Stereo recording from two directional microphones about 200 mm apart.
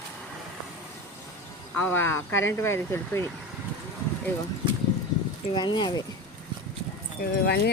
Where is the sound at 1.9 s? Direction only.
10° left (ahead or behind).